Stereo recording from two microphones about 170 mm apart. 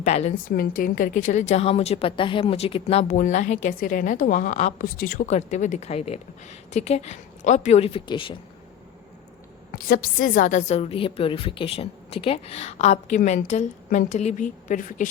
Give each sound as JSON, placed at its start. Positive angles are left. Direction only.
{"t": 0.0, "sound": "a woman's voice", "side_deg": 40}
{"t": 0.5, "sound": "a woman's voice", "side_deg": 55}
{"t": 9.7, "sound": "a woman's voice", "side_deg": 60}